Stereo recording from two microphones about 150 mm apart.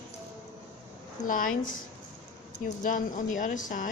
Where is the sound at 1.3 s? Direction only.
65° left (ahead or behind).